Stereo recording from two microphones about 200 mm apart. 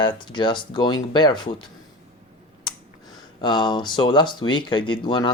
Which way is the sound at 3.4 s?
20° left (ahead or behind).